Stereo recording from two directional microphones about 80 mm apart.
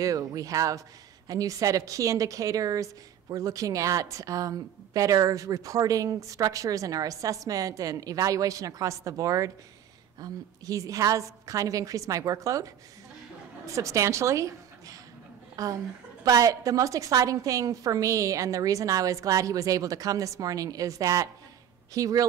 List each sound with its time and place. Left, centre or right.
0.0 s a woman's voice: right
13.7 s a woman's voice: right